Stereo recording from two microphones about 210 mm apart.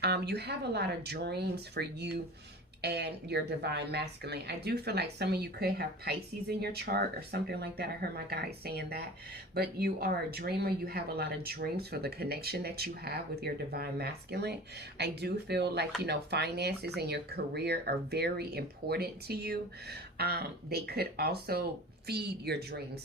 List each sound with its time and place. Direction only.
0.0 s speech: 50° right (ahead or behind)